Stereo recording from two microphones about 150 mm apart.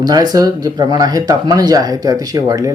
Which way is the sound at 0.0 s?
25° right (ahead or behind).